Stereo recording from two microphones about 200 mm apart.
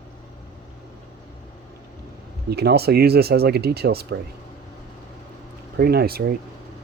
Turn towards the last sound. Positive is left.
turn(degrees=-50)  # may be behind; listen again after turning